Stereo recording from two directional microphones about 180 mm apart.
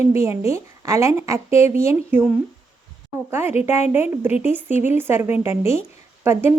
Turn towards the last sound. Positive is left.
turn(degrees=-15)  # may be behind; listen again after turning